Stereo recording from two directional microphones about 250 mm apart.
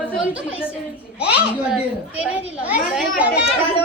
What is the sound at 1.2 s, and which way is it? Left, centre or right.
A child's voice, centre.